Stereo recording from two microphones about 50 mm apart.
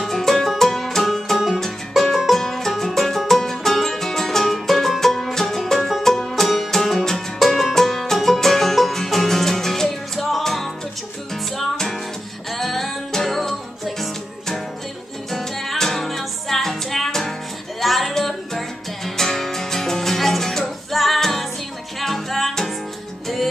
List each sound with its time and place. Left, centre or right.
0.0 s music: centre